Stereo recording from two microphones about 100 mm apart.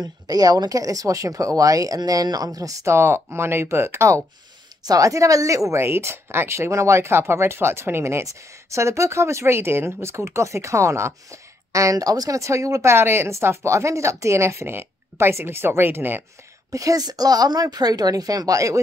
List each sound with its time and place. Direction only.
0.0 s a woman's voice: 40° right (ahead or behind); by 16.3 s 20° right (ahead or behind)
16.7 s speech: 35° right (ahead or behind)